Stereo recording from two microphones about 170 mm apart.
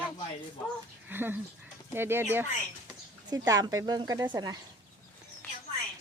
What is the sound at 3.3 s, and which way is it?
Speech, 25° right (ahead or behind).